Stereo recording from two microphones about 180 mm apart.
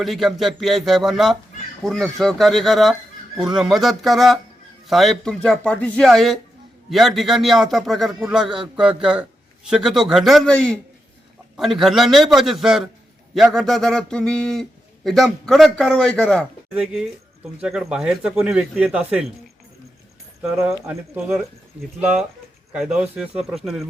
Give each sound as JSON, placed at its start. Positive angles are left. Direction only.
{"t": 0.0, "sound": "a man's voice", "side_deg": 0}
{"t": 20.7, "sound": "speech", "side_deg": -15}
{"t": 21.2, "sound": "a man's voice", "side_deg": 0}